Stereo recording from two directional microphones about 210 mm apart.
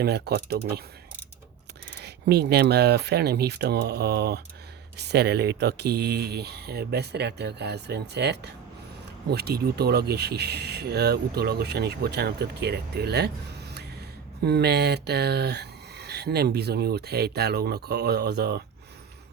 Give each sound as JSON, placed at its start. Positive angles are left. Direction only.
{"t": 0.0, "sound": "speech", "side_deg": -50}
{"t": 2.0, "sound": "speech", "side_deg": -50}